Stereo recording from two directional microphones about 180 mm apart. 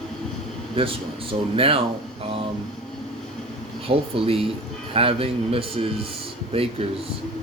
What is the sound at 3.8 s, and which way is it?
A man's voice, 30° right (ahead or behind).